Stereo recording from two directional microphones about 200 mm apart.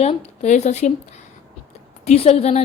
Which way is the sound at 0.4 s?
35° left (ahead or behind).